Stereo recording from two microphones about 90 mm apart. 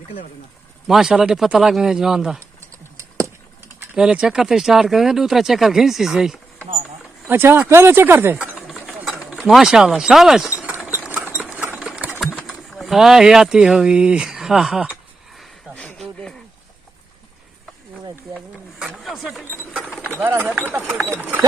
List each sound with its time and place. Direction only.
0.9 s speech: 5° right (ahead or behind)
3.9 s speech: 10° right (ahead or behind)
7.3 s speech: 25° right (ahead or behind)
8.6 s a sound: 5° right (ahead or behind)
10.9 s engine: 20° right (ahead or behind)
11.3 s sewing machine: 15° right (ahead or behind)
11.8 s engine: 10° right (ahead or behind)
12.4 s speech: centre (ahead or behind)
15.7 s a sound: 10° left (ahead or behind)
19.0 s speech: centre (ahead or behind)
20.2 s speech: 20° right (ahead or behind)